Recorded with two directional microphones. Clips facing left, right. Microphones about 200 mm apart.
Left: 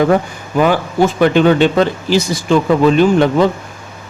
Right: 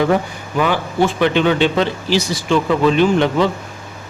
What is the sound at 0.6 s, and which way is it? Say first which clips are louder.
Speech: left 4 dB; 45° left (ahead or behind).